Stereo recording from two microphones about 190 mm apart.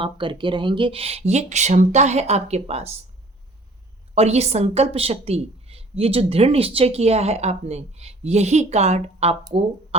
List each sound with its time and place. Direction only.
0.0 s a woman's voice: 25° right (ahead or behind)
4.1 s a woman's voice: 35° right (ahead or behind)